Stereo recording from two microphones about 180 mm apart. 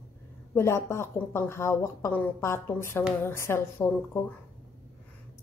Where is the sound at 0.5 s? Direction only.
15° left (ahead or behind).